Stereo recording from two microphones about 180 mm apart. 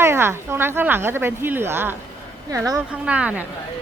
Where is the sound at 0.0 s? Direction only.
15° right (ahead or behind).